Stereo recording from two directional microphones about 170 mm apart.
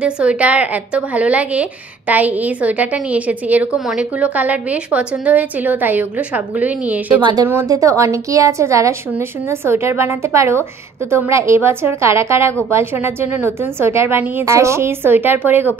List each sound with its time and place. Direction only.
0.0 s a woman's voice: 5° right (ahead or behind)
7.2 s speech: 30° right (ahead or behind)
7.4 s a woman's voice: 15° right (ahead or behind)